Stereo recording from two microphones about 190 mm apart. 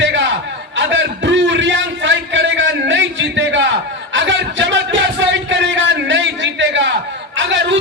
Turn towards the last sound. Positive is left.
turn(degrees=-70)  # may be behind; listen again after turning